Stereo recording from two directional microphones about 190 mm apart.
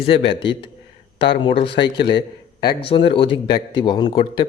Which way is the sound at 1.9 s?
60° left (ahead or behind).